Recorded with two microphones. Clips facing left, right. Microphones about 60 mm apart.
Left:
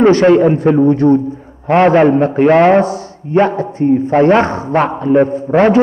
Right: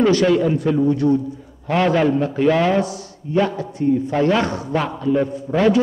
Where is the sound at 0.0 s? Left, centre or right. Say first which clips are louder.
Left 7 dB; left.